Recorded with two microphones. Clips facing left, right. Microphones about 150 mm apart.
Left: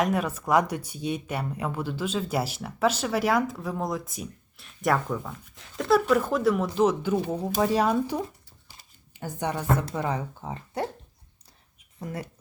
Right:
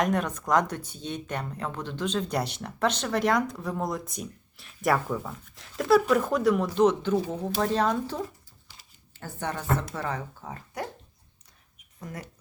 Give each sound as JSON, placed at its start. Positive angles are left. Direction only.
{"t": 0.0, "sound": "speech", "side_deg": 5}